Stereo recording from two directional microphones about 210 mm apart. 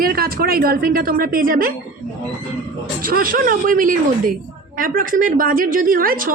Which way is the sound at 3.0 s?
40° right (ahead or behind).